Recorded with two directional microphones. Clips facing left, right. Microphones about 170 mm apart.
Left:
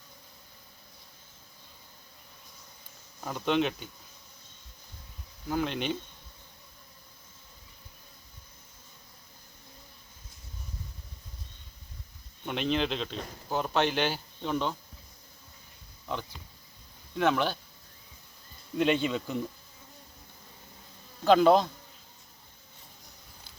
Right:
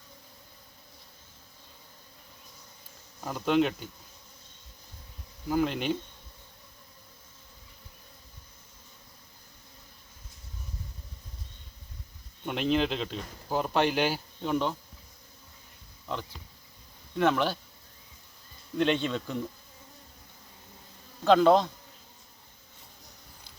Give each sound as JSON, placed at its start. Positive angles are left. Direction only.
{"t": 3.2, "sound": "speech", "side_deg": -5}
{"t": 5.5, "sound": "speech", "side_deg": -5}
{"t": 12.5, "sound": "speech", "side_deg": -5}
{"t": 17.2, "sound": "speech", "side_deg": 0}
{"t": 18.8, "sound": "speech", "side_deg": 5}
{"t": 21.2, "sound": "speech", "side_deg": 5}